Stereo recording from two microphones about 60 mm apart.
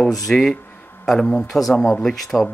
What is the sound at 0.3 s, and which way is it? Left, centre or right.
Speech, centre.